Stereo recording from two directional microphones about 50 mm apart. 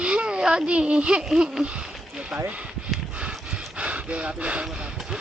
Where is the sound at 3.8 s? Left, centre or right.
Right.